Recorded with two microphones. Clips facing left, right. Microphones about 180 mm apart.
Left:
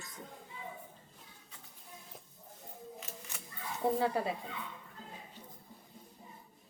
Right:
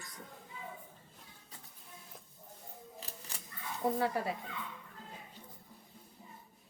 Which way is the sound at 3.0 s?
35° right (ahead or behind).